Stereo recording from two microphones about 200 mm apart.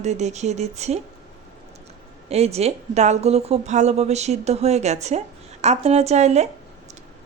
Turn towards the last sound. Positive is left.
turn(degrees=-35)  # may be behind; listen again after turning